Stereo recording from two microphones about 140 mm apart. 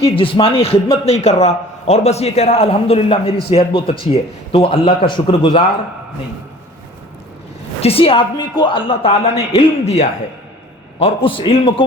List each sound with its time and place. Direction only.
0.0 s a man's voice: 40° left (ahead or behind)
7.8 s a man's voice: 45° left (ahead or behind)